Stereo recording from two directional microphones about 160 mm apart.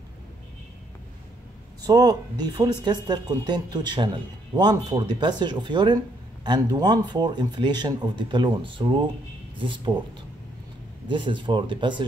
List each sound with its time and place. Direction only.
1.9 s speech: 25° right (ahead or behind)
11.1 s speech: 30° right (ahead or behind)